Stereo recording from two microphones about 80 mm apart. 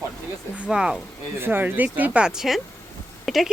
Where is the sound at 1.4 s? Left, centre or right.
Right.